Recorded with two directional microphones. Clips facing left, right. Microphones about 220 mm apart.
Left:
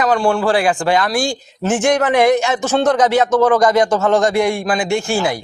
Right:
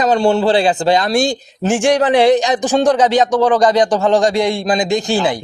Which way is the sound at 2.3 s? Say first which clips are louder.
Right 2 dB; 15° right (ahead or behind).